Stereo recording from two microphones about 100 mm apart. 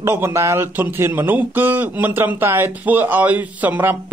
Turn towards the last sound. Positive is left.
turn(degrees=-20)  # may be behind; listen again after turning